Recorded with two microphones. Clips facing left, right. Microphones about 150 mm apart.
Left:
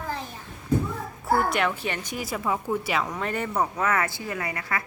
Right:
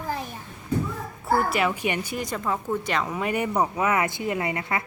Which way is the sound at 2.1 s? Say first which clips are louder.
Even; 5° left (ahead or behind).